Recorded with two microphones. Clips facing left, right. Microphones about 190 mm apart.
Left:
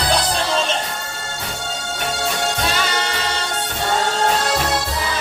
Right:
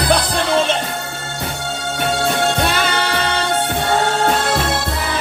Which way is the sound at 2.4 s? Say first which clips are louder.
Right 4 dB; 60° right (ahead or behind).